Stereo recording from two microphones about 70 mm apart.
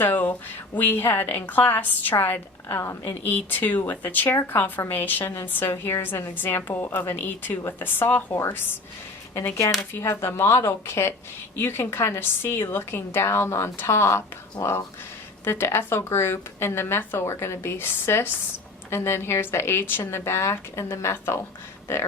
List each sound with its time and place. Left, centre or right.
0.0 s a woman's voice: left
2.6 s a woman's voice: left
3.2 s a woman's voice: left
10.0 s a woman's voice: left
15.4 s speech: left